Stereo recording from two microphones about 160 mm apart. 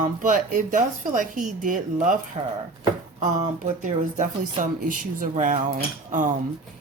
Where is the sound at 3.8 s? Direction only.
55° right (ahead or behind).